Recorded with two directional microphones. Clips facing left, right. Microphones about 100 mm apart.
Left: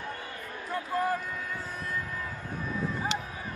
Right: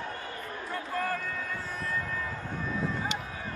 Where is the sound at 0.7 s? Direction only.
20° left (ahead or behind).